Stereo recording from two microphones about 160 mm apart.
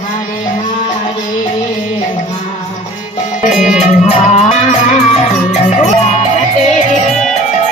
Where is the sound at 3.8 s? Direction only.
45° left (ahead or behind).